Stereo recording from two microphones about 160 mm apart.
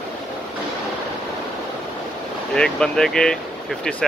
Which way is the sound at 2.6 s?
5° left (ahead or behind).